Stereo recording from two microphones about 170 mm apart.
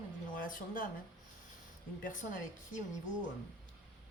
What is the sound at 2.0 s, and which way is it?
Speech, 50° left (ahead or behind).